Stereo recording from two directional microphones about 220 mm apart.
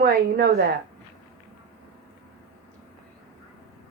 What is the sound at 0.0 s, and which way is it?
Speech, 45° right (ahead or behind).